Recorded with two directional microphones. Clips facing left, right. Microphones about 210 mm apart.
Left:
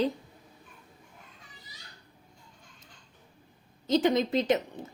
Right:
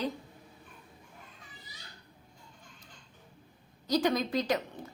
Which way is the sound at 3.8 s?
20° left (ahead or behind).